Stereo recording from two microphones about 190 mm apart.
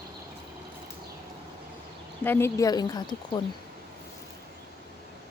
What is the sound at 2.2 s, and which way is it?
Speech, 10° left (ahead or behind).